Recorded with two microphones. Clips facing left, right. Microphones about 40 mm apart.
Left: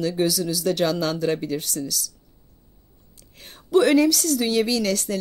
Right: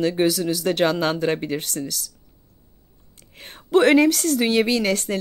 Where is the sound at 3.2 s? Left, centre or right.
Right.